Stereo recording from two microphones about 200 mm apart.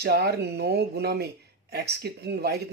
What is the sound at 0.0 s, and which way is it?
Speech, 55° right (ahead or behind).